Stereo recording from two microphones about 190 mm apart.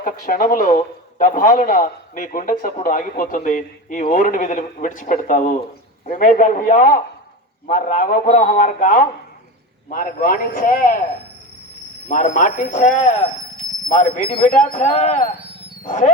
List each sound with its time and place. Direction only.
0.0 s a man's voice: 45° left (ahead or behind)
12.0 s a man's voice: 40° left (ahead or behind)